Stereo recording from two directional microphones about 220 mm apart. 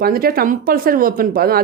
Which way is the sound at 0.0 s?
45° right (ahead or behind).